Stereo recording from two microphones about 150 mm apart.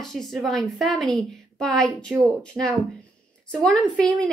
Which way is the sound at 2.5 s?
10° right (ahead or behind).